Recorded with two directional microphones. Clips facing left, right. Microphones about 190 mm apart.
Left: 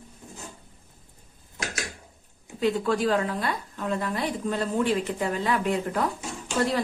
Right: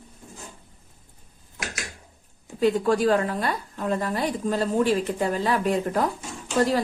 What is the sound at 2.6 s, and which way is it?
A woman's voice, 40° right (ahead or behind).